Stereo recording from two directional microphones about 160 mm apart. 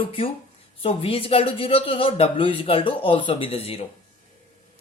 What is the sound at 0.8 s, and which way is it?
Speech, 35° left (ahead or behind).